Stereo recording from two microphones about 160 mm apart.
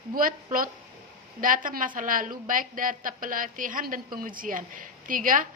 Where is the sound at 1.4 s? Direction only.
60° right (ahead or behind).